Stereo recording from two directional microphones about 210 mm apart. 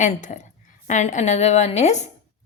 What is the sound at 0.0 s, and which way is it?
A woman's voice, 35° left (ahead or behind).